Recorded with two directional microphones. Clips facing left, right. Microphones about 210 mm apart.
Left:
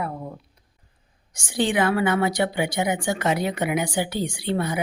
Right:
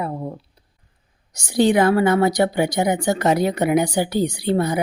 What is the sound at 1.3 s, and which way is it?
A woman's voice, 40° right (ahead or behind).